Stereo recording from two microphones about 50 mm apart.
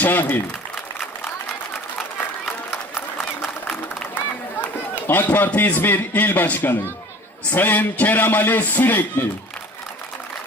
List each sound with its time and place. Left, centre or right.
0.0 s speech: left
4.6 s run: left
5.5 s a man's voice: left